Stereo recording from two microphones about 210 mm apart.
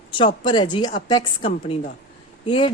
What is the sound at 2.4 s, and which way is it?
Speech, 25° left (ahead or behind).